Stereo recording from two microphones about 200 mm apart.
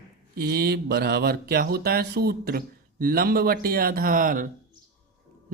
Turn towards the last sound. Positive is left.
turn(degrees=-45)  # may be behind; listen again after turning